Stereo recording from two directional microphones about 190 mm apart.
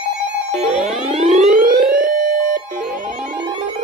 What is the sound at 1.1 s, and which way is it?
Siren, 35° right (ahead or behind).